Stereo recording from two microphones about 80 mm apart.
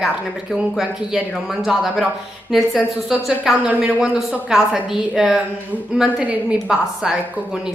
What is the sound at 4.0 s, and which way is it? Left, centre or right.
A woman's voice, centre.